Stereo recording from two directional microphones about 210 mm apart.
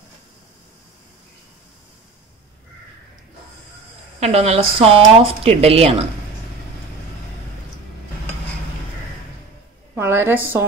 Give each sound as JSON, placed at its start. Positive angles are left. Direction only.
{"t": 4.2, "sound": "speech", "side_deg": -30}
{"t": 9.9, "sound": "a woman's voice", "side_deg": -10}